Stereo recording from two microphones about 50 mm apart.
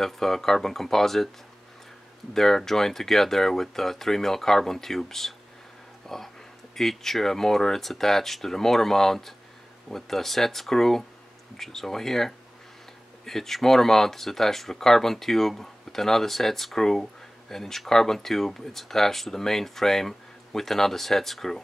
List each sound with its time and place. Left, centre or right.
0.0 s speech: centre
2.3 s speech: centre